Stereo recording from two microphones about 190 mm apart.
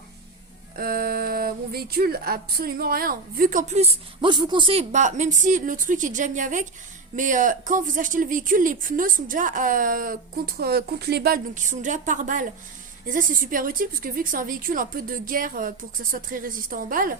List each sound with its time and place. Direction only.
0.8 s speech: 55° right (ahead or behind)